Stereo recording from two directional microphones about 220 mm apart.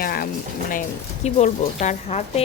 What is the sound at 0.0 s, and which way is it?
Speech, 45° left (ahead or behind).